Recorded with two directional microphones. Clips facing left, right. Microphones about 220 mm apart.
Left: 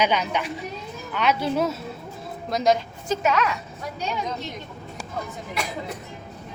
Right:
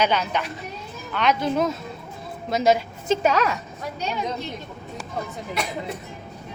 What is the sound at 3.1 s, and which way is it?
Speech, 35° right (ahead or behind).